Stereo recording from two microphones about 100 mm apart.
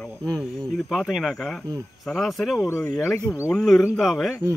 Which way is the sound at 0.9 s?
5° right (ahead or behind).